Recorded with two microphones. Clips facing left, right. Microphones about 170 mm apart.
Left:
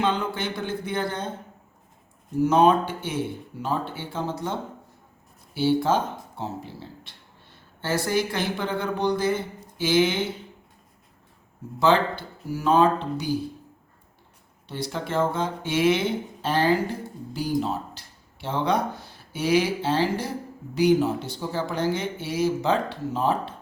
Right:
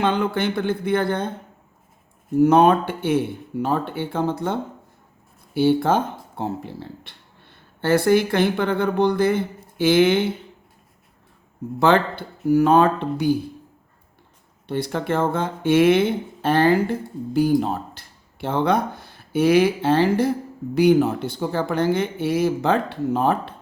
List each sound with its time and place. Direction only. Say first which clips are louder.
0.0 s speech: right 5 dB; 60° right (ahead or behind)
2.4 s speech: right 4 dB; 60° right (ahead or behind)
11.8 s speech: right 3 dB; 55° right (ahead or behind)
14.7 s speech: right 6 dB; 55° right (ahead or behind)